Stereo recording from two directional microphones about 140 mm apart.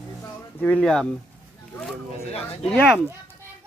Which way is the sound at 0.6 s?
5° left (ahead or behind).